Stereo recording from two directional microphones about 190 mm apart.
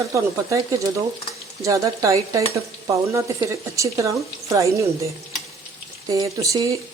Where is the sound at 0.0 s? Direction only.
15° right (ahead or behind).